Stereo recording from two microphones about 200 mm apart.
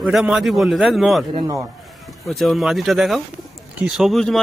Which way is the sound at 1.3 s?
20° right (ahead or behind).